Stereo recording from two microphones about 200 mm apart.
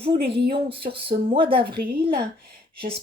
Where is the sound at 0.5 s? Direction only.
25° right (ahead or behind).